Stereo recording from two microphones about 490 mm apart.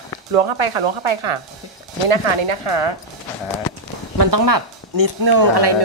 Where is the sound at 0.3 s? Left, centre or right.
Right.